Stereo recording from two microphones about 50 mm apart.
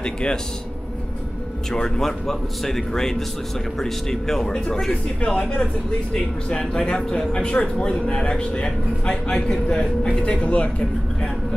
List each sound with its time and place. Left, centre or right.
0.0 s a man's voice: centre
1.7 s speech: centre
5.2 s a man's voice: left
6.7 s a man's voice: centre